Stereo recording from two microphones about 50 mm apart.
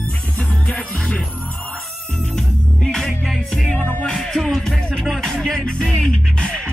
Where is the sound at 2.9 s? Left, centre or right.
Centre.